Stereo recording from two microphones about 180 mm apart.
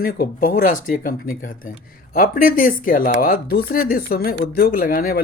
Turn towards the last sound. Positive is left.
turn(degrees=55)  # may be behind; listen again after turning